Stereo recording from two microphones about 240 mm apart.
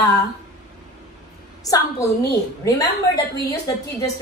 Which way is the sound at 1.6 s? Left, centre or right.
Centre.